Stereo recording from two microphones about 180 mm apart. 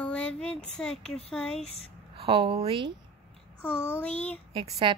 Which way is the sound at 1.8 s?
35° right (ahead or behind).